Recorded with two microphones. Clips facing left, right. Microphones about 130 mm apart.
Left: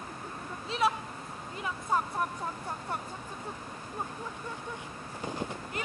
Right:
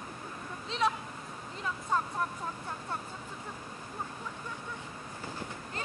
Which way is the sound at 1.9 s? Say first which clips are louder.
Left 2 dB; 10° left (ahead or behind).